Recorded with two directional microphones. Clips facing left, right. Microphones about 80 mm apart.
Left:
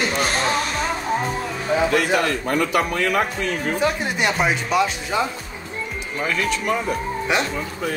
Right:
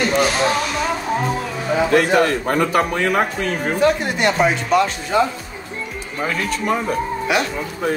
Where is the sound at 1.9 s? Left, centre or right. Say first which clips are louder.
Right 4 dB; right.